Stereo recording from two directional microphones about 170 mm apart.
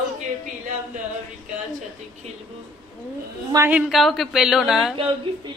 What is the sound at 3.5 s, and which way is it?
Speech, 15° right (ahead or behind).